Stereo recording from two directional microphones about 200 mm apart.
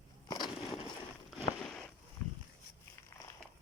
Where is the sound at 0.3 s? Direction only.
20° left (ahead or behind).